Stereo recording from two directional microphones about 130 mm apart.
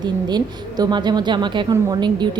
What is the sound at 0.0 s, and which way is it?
A woman's voice, 30° right (ahead or behind).